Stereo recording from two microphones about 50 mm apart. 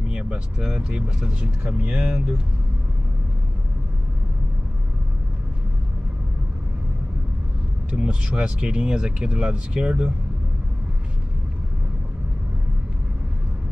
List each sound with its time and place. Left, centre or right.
0.1 s speech: centre
7.9 s speech: right